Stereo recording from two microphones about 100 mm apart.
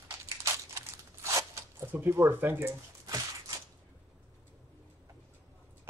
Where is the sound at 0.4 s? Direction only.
30° right (ahead or behind).